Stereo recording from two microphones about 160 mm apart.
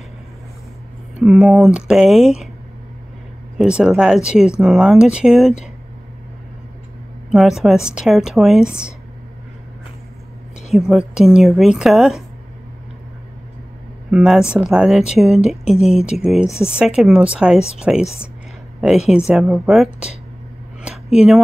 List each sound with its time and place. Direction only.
1.2 s speech: centre (ahead or behind)
3.5 s speech: 5° right (ahead or behind)
7.2 s speech: centre (ahead or behind)
10.7 s speech: centre (ahead or behind)
14.1 s speech: 5° right (ahead or behind)
16.4 s speech: 15° left (ahead or behind)
16.7 s speech: 5° right (ahead or behind)
19.0 s speech: 5° right (ahead or behind)